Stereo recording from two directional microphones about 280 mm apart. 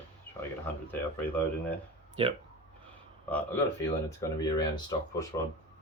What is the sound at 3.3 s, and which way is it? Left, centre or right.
Speech, centre.